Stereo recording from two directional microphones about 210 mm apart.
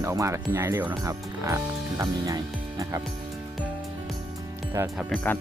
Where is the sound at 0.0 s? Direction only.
15° right (ahead or behind).